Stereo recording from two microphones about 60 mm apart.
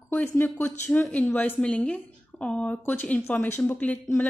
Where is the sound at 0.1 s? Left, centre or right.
Left.